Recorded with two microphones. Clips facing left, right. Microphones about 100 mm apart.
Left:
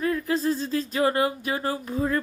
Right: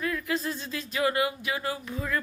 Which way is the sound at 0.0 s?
35° left (ahead or behind).